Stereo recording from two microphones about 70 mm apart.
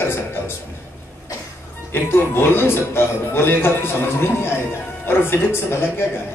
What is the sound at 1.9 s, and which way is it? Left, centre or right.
A man's voice, left.